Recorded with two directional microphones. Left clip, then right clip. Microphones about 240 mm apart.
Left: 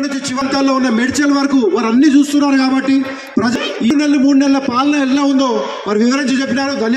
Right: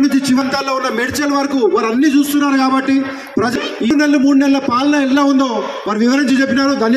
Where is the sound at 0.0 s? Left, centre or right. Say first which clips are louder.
Right 4 dB; right.